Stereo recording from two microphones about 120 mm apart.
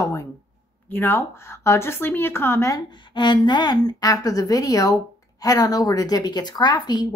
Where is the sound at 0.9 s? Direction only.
15° left (ahead or behind).